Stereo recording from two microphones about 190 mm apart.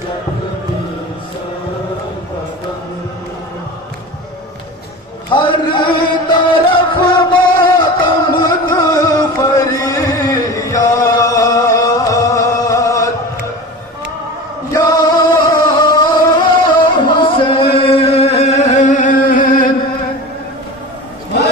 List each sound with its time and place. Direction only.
5.3 s music: 25° left (ahead or behind)
14.7 s music: 20° left (ahead or behind)
17.0 s singing: 25° left (ahead or behind); by 19.7 s 45° left (ahead or behind)